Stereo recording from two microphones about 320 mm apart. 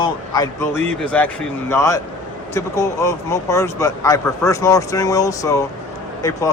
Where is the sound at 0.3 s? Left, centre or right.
Centre.